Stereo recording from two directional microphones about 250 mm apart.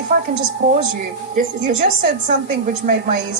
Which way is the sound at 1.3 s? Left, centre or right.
Right.